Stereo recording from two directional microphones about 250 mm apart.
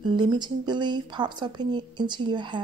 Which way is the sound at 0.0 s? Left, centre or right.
Centre.